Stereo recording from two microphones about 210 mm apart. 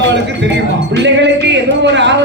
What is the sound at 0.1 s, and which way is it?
Music, 55° right (ahead or behind).